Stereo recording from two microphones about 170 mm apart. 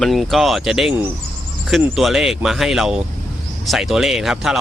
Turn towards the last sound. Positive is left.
turn(degrees=0)  # may be behind; listen again after turning